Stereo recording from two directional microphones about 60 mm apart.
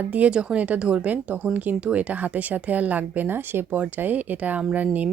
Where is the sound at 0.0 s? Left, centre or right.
Right.